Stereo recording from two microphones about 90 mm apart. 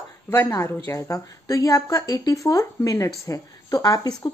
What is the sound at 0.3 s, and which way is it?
A woman's voice, 30° left (ahead or behind).